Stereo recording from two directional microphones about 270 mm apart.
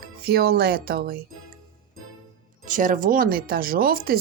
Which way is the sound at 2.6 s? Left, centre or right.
Right.